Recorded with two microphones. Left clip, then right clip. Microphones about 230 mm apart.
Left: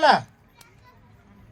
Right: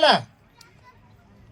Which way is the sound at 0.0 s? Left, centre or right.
Right.